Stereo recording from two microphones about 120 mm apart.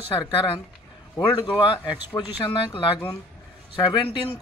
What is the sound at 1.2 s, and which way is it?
Speech, 40° left (ahead or behind).